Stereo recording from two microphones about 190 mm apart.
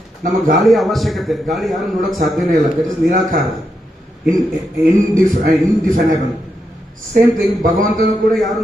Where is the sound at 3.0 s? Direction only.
45° right (ahead or behind).